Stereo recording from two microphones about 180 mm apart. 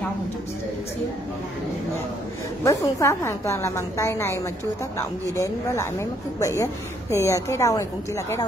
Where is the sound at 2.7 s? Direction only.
15° left (ahead or behind).